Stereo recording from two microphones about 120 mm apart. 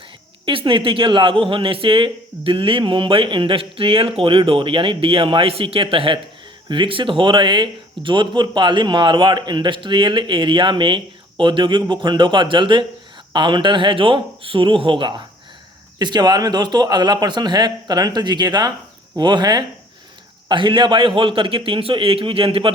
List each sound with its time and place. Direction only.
0.4 s a man's voice: 45° right (ahead or behind)